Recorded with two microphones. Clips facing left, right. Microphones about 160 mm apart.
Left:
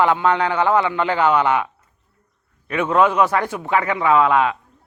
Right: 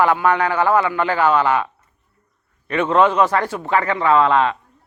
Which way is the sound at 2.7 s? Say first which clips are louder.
Right 1 dB; 5° left (ahead or behind).